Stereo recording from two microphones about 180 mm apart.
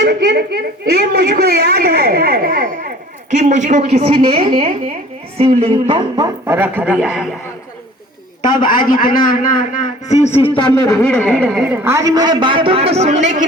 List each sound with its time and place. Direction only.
0.0 s a man's voice: 70° right (ahead or behind); by 6.2 s 30° right (ahead or behind)
6.4 s speech: 10° right (ahead or behind)
8.6 s a man's voice: 50° left (ahead or behind)
9.8 s a man's voice: 40° left (ahead or behind)
10.6 s a man's voice: 20° left (ahead or behind)
11.1 s a man's voice: 5° left (ahead or behind); by 13.4 s 40° right (ahead or behind)